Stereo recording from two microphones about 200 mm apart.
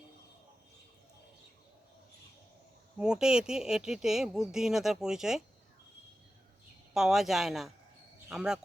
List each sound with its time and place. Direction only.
3.0 s speech: 5° right (ahead or behind)
6.9 s speech: centre (ahead or behind)